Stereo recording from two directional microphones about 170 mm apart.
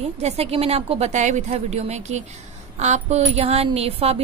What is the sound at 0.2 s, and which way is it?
Speech, 40° right (ahead or behind).